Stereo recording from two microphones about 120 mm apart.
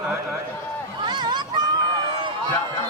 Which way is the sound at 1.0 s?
40° right (ahead or behind).